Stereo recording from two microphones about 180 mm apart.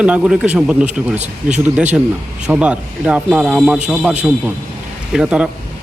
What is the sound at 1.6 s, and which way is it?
Speech, 10° right (ahead or behind).